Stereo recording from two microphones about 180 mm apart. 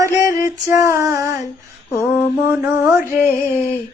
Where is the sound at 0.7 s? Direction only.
15° right (ahead or behind).